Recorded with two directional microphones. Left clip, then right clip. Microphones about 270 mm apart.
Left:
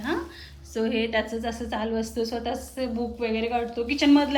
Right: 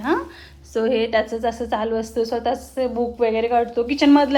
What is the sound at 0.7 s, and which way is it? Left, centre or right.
A woman's voice, centre.